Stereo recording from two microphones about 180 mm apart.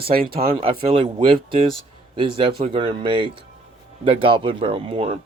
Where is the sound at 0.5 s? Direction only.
30° right (ahead or behind).